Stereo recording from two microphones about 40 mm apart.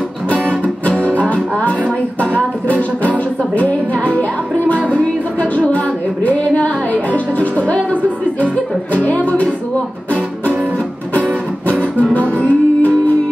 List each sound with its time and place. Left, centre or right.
0.3 s music: left
12.0 s music: left